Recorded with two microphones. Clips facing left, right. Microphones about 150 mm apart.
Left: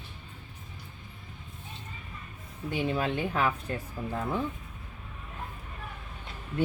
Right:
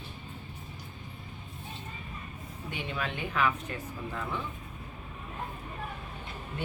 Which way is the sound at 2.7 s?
35° left (ahead or behind).